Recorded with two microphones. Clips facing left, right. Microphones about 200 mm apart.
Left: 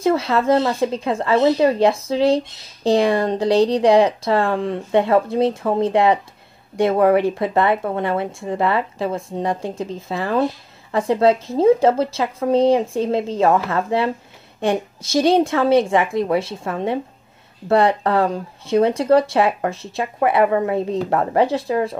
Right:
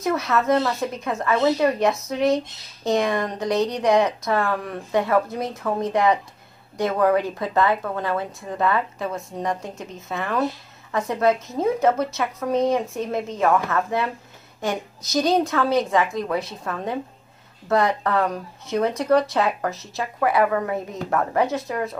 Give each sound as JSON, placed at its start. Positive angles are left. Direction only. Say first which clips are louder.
{"t": 0.0, "sound": "speech", "louder": "left 4 dB", "side_deg": 30}